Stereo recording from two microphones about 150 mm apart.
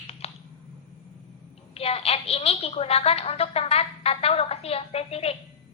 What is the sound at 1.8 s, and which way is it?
A woman's voice, 40° left (ahead or behind).